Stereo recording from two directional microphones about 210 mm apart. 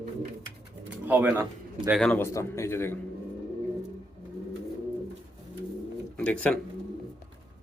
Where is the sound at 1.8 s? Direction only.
Centre (ahead or behind).